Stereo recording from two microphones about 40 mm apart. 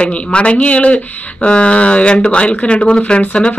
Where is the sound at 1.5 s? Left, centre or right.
Left.